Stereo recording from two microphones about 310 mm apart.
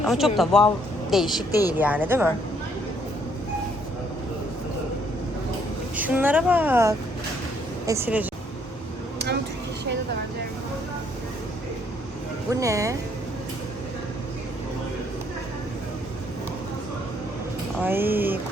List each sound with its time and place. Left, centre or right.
0.0 s a woman's voice: centre
1.8 s a woman's voice: centre
6.0 s a woman's voice: centre
9.1 s a sound: right
12.5 s speech: centre
17.7 s a sound: centre